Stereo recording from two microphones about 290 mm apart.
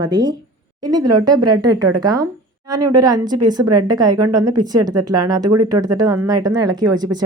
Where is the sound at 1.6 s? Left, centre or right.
Right.